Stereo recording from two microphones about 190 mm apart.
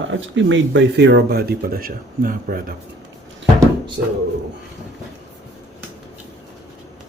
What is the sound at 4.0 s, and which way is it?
Speech, 65° right (ahead or behind).